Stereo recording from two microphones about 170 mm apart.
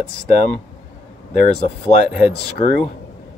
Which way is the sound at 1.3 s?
40° left (ahead or behind).